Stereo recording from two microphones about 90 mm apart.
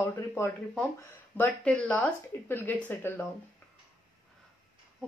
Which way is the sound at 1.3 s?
15° left (ahead or behind).